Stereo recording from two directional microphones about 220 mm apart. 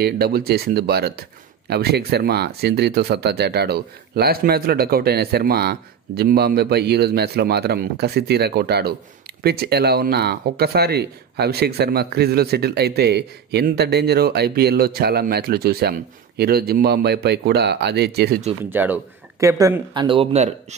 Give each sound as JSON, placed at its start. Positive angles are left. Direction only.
{"t": 0.0, "sound": "speech", "side_deg": -45}
{"t": 18.7, "sound": "speech", "side_deg": -10}